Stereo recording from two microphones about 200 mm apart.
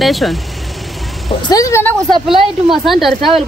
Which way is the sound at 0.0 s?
Centre (ahead or behind).